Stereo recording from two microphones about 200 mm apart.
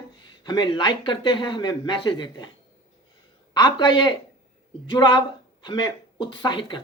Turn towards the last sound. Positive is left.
turn(degrees=25)  # may be behind; listen again after turning